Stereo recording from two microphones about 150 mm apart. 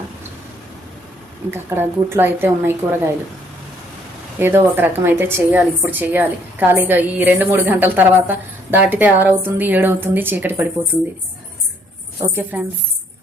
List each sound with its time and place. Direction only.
1.5 s a woman's voice: 15° right (ahead or behind)
4.4 s a woman's voice: 15° right (ahead or behind)
12.2 s a woman's voice: 15° right (ahead or behind)